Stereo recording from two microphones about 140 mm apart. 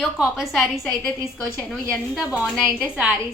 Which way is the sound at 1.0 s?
15° left (ahead or behind).